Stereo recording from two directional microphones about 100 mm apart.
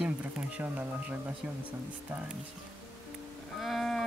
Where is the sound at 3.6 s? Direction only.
Centre (ahead or behind).